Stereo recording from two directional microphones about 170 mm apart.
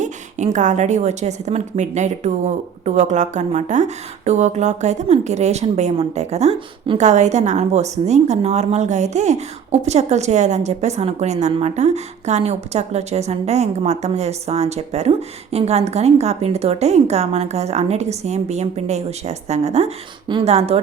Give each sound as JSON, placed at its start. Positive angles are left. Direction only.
{"t": 0.0, "sound": "a woman's voice", "side_deg": -45}